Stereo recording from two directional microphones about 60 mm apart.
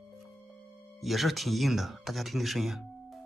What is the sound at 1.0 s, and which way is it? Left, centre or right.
Speech, centre.